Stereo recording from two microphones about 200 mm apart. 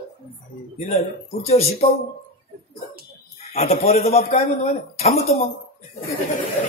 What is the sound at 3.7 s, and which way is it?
Speech, 30° left (ahead or behind).